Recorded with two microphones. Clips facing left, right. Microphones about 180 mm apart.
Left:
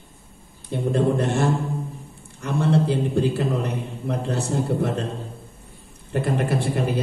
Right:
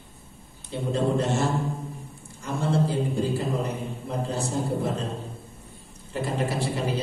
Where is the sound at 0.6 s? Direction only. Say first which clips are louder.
Left 4 dB; 55° left (ahead or behind).